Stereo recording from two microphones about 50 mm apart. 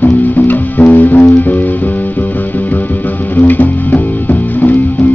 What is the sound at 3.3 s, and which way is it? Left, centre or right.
Music, left.